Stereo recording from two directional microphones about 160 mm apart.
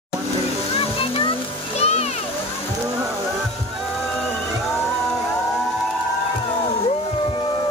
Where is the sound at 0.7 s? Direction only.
35° left (ahead or behind).